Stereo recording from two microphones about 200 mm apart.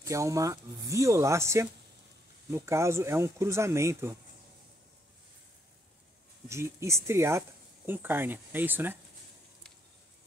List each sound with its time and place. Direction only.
0.0 s speech: 15° right (ahead or behind)
6.5 s speech: 15° right (ahead or behind)